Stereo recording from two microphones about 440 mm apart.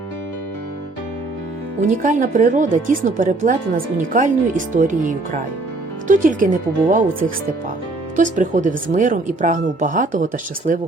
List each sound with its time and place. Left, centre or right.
1.8 s speech: centre
8.1 s speech: centre